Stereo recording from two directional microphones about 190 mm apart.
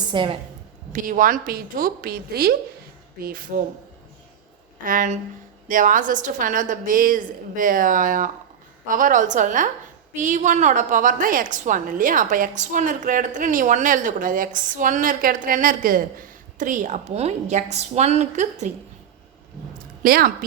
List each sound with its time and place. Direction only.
0.1 s a woman's voice: 25° right (ahead or behind)
0.9 s a woman's voice: 45° right (ahead or behind)
4.8 s a woman's voice: 45° right (ahead or behind)
20.0 s a woman's voice: 50° right (ahead or behind)